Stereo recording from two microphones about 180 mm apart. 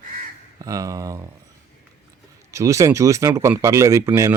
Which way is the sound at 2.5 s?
15° right (ahead or behind).